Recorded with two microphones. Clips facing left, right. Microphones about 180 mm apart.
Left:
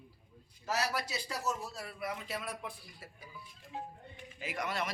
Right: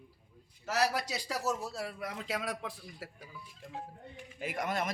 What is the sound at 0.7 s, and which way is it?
A man's voice, 85° right.